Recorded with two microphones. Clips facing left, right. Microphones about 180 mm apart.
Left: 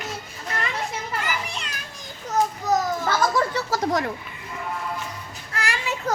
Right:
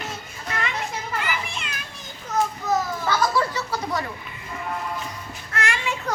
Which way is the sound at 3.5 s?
90° left.